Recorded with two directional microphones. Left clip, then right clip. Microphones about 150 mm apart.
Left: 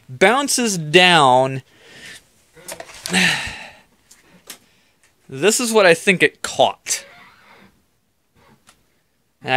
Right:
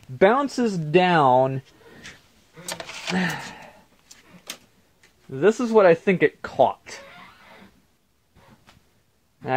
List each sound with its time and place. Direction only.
0.2 s speech: 40° left (ahead or behind)
0.5 s speech: 65° left (ahead or behind)
0.7 s speech: 25° left (ahead or behind)
3.2 s sigh: 50° left (ahead or behind)
5.3 s speech: 30° left (ahead or behind)